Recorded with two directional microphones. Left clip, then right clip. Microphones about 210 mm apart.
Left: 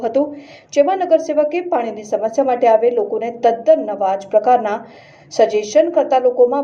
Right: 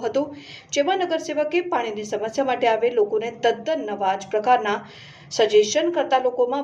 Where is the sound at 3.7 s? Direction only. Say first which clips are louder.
Left 9 dB; 20° right (ahead or behind).